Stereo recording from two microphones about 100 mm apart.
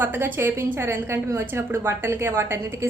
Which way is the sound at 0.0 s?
20° right (ahead or behind).